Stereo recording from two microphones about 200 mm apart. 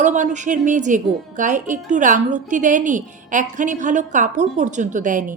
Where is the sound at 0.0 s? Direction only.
40° right (ahead or behind).